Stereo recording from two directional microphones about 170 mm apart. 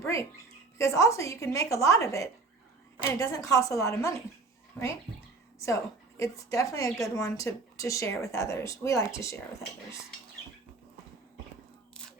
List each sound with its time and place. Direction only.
0.0 s a sound: 15° left (ahead or behind)
0.8 s a woman's voice: 15° left (ahead or behind)
6.1 s a woman's voice: 20° left (ahead or behind)